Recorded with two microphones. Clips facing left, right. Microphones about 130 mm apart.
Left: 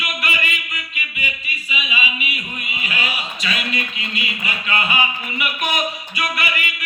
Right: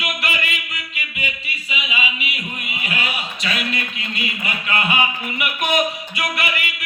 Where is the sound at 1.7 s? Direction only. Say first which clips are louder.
Even; 80° right.